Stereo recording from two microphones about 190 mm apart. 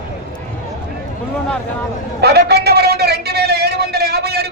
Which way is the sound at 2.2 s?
60° right (ahead or behind).